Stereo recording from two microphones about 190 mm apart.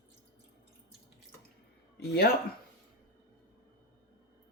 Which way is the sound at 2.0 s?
55° left (ahead or behind).